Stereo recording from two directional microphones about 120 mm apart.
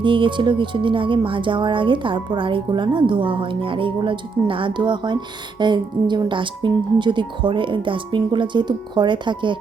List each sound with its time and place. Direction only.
0.0 s speech: 45° right (ahead or behind)